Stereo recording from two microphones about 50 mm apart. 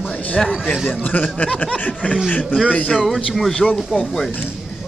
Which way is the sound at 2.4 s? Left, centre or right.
Centre.